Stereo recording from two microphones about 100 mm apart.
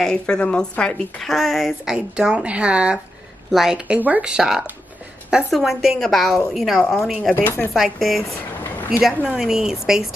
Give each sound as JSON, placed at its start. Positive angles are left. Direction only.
{"t": 0.0, "sound": "a woman's voice", "side_deg": 10}
{"t": 7.4, "sound": "speech", "side_deg": 20}
{"t": 7.7, "sound": "a woman's voice", "side_deg": 0}